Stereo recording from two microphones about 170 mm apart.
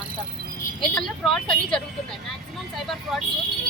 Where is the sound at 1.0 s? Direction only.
Centre (ahead or behind).